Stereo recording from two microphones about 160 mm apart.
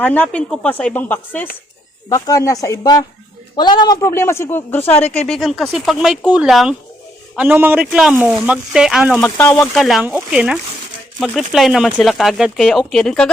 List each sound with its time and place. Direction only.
0.0 s a woman's voice: 10° left (ahead or behind)
2.0 s a woman's voice: 20° left (ahead or behind); by 9.1 s 5° right (ahead or behind)
9.1 s a woman's voice: 5° left (ahead or behind)